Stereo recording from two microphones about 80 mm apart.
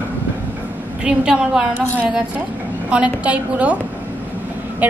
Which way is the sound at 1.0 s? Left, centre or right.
Centre.